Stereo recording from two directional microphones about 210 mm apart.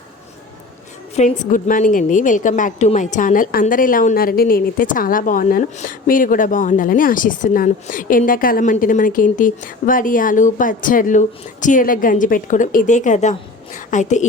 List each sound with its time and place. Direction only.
1.1 s a woman's voice: 35° left (ahead or behind)